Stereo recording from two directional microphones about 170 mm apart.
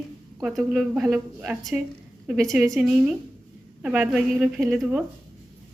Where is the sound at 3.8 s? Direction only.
10° right (ahead or behind).